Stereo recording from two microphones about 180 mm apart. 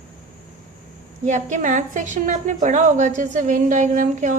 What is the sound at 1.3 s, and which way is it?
A woman's voice, 45° right (ahead or behind).